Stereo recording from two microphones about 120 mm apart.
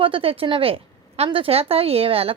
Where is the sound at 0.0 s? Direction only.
50° right (ahead or behind).